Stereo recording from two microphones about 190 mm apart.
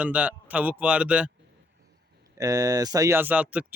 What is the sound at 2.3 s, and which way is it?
Speech, 15° right (ahead or behind).